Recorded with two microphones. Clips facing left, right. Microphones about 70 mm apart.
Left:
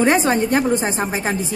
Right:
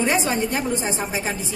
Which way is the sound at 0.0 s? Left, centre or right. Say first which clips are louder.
Left 5 dB; left.